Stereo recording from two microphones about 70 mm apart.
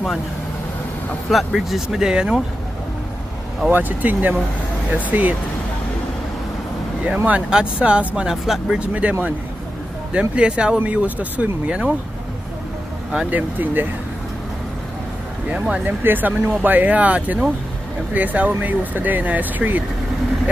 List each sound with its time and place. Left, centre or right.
1.3 s speech: centre
3.7 s speech: right
7.2 s speech: centre
8.3 s speech: centre
9.0 s speech: right
13.3 s speech: right
15.5 s speech: centre
15.8 s speech: right